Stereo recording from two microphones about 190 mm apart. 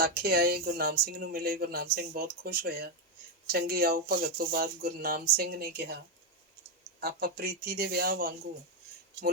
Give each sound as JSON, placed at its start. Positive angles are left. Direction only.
{"t": 0.0, "sound": "speech", "side_deg": -50}
{"t": 7.0, "sound": "speech", "side_deg": -55}